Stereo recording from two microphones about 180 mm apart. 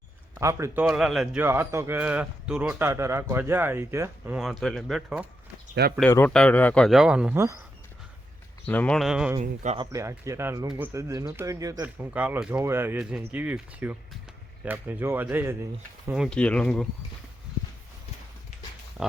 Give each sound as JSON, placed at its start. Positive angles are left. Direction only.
{"t": 0.3, "sound": "a man's voice", "side_deg": -15}
{"t": 4.4, "sound": "speech", "side_deg": 0}
{"t": 6.0, "sound": "speech", "side_deg": 10}
{"t": 8.6, "sound": "speech", "side_deg": 5}
{"t": 9.7, "sound": "a man's voice", "side_deg": -20}
{"t": 12.1, "sound": "a man's voice", "side_deg": -5}
{"t": 16.3, "sound": "speech", "side_deg": 5}
{"t": 19.0, "sound": "pig", "side_deg": -5}